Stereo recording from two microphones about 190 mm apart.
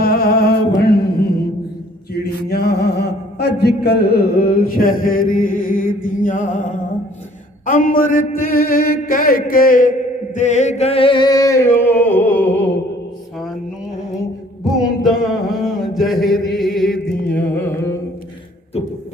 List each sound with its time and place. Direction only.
0.0 s music: 55° left (ahead or behind)
2.1 s a sound: 55° left (ahead or behind); by 6.7 s 40° left (ahead or behind)
7.6 s a man's voice: 45° left (ahead or behind)
10.3 s music: 40° left (ahead or behind); by 12.7 s 10° left (ahead or behind)
14.8 s a sound: centre (ahead or behind)
17.2 s carnatic music: 10° left (ahead or behind)